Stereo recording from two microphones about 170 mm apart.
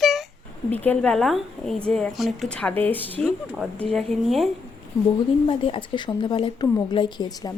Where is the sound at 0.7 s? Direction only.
10° left (ahead or behind).